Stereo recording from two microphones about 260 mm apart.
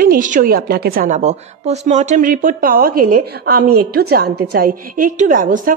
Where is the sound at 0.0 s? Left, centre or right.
Right.